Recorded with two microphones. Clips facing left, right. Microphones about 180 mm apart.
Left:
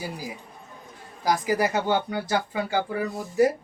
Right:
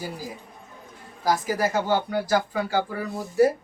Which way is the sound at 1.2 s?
15° left (ahead or behind).